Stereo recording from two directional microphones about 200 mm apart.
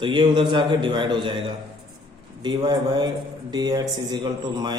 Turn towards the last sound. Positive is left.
turn(degrees=-20)  # may be behind; listen again after turning